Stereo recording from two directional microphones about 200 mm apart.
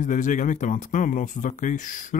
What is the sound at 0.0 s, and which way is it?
Speech, 40° left (ahead or behind).